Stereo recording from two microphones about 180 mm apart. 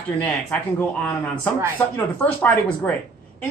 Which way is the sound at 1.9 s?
10° left (ahead or behind).